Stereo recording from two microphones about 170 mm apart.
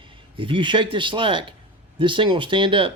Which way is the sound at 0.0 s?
30° right (ahead or behind).